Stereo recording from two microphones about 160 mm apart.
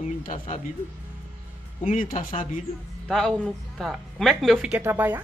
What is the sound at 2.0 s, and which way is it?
Speech, 55° left (ahead or behind).